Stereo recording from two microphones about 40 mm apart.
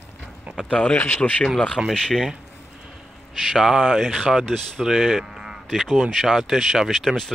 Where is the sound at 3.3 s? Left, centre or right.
Centre.